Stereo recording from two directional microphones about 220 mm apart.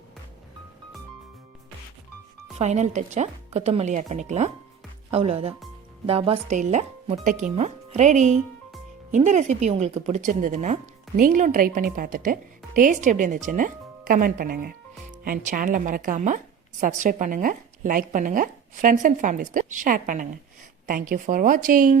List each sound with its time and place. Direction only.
2.6 s a woman's voice: 30° right (ahead or behind)